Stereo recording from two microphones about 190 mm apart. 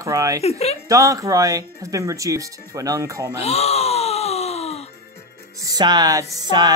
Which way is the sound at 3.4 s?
35° left (ahead or behind).